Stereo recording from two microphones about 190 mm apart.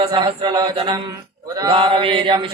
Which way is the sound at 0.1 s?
25° right (ahead or behind).